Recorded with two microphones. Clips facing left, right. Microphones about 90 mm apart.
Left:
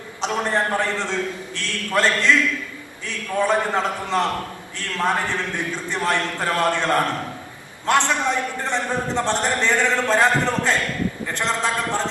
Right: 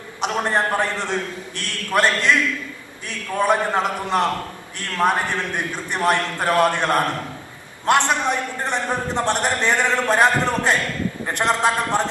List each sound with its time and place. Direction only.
0.2 s a man's voice: 20° right (ahead or behind)